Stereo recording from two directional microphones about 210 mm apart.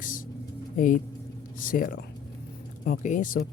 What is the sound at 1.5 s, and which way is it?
Speech, 40° left (ahead or behind).